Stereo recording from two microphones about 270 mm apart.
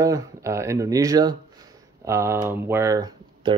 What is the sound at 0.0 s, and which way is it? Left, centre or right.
Speech, centre.